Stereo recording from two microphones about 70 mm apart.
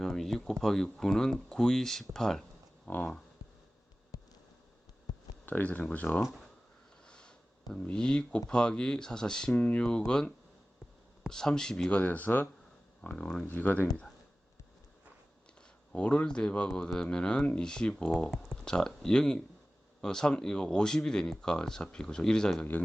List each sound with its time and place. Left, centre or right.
0.0 s a sound: centre
0.6 s speech: centre
2.8 s a sound: left
5.5 s speech: left
6.2 s speech: centre
7.1 s sniff: centre
7.7 s speech: centre
11.9 s speech: left
13.0 s speech: centre
13.5 s speech: left
15.9 s speech: centre